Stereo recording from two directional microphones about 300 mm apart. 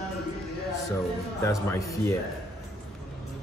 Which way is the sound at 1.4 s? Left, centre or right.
Centre.